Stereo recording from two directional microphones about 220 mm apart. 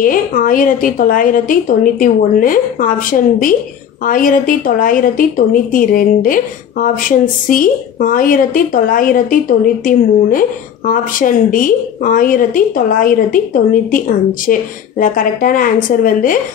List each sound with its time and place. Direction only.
0.0 s a woman's voice: 35° left (ahead or behind)